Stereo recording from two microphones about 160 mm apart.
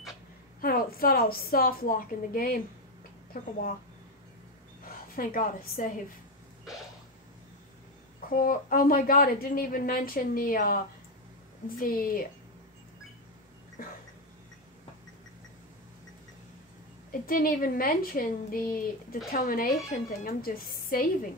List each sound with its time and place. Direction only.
0.6 s a woman's voice: 65° left (ahead or behind)
4.8 s a woman's voice: 65° left (ahead or behind)
8.3 s a woman's voice: 60° left (ahead or behind)
13.8 s a sound: 65° left (ahead or behind)
17.3 s a woman's voice: 60° left (ahead or behind)